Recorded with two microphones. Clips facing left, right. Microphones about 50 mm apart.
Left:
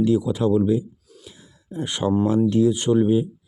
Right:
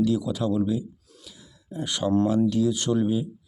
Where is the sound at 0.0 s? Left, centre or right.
Left.